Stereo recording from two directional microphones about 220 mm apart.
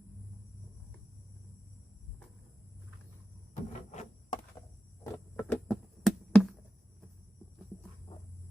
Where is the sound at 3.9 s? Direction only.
30° left (ahead or behind).